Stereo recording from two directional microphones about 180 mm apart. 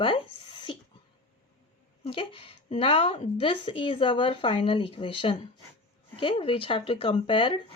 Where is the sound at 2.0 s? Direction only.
30° left (ahead or behind).